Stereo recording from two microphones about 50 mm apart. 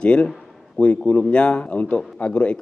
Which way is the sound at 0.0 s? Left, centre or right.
Left.